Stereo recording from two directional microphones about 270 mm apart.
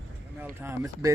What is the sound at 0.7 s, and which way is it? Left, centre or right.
Speech, centre.